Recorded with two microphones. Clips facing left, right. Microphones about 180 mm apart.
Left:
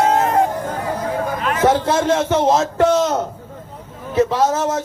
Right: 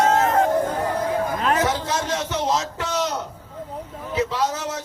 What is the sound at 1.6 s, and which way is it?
A man's voice, 55° left (ahead or behind).